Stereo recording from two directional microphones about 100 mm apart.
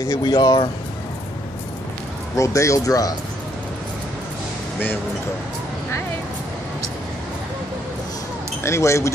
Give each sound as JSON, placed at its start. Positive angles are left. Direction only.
{"t": 0.0, "sound": "speech", "side_deg": 40}
{"t": 2.3, "sound": "speech", "side_deg": 30}
{"t": 8.6, "sound": "speech", "side_deg": 30}